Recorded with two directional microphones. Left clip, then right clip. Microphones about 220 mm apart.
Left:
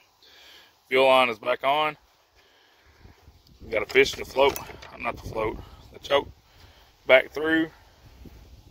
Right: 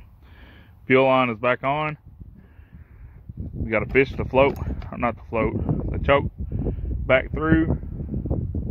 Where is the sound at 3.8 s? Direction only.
15° left (ahead or behind).